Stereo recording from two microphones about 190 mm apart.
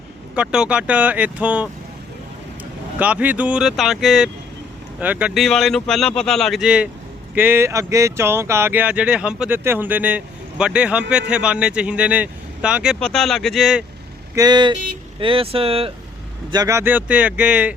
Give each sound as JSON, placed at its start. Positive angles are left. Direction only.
{"t": 0.3, "sound": "speech", "side_deg": -5}
{"t": 3.0, "sound": "speech", "side_deg": -10}
{"t": 14.3, "sound": "speech", "side_deg": -20}
{"t": 16.5, "sound": "speech", "side_deg": -20}